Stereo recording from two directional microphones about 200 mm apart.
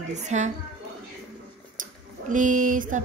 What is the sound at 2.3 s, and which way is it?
Speech, 40° right (ahead or behind).